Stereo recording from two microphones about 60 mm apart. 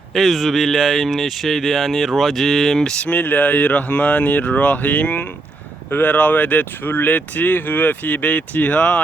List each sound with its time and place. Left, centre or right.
0.1 s speech: centre
3.1 s speech: left